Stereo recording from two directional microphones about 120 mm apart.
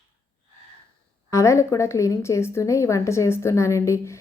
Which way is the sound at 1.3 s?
25° left (ahead or behind).